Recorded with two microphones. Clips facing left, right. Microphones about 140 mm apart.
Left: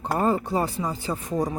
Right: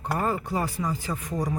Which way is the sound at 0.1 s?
25° left (ahead or behind).